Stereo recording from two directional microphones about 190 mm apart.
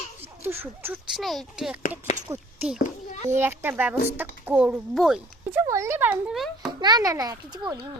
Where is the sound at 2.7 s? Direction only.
40° left (ahead or behind).